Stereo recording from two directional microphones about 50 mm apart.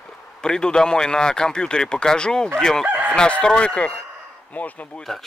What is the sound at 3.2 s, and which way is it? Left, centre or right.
Speech, centre.